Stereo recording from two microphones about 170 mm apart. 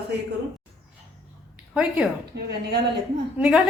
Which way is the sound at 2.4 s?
75° right (ahead or behind).